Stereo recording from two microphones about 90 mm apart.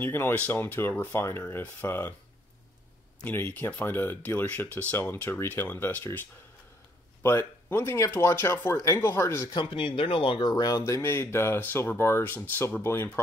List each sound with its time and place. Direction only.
0.0 s speech: 25° left (ahead or behind)
3.3 s speech: 20° left (ahead or behind)
7.2 s speech: 30° left (ahead or behind)
9.5 s speech: 65° left (ahead or behind); by 10.5 s 80° left
10.5 s speech: 45° left (ahead or behind)
10.9 s speech: 30° left (ahead or behind)